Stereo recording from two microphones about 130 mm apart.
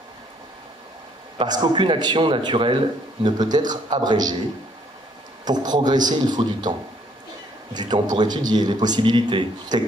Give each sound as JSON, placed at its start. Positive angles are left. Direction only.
{"t": 1.4, "sound": "speech", "side_deg": -35}
{"t": 5.4, "sound": "speech", "side_deg": -30}
{"t": 7.7, "sound": "speech", "side_deg": -35}